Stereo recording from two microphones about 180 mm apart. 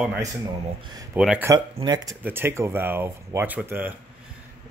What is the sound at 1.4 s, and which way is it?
Speech, 20° right (ahead or behind).